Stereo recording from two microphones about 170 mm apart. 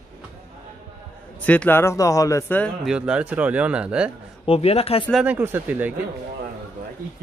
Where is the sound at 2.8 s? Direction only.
5° right (ahead or behind).